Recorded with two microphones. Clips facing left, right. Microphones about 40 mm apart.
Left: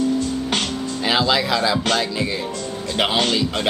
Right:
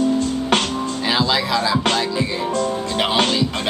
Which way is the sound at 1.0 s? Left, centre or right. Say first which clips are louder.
Left 1 dB; centre.